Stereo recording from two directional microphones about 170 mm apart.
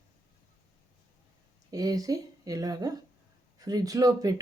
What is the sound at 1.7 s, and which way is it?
Speech, 20° right (ahead or behind).